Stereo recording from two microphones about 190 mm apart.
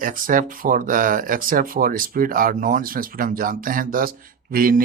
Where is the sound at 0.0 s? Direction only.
45° right (ahead or behind).